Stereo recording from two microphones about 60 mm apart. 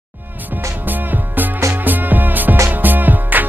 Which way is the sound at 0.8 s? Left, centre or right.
Right.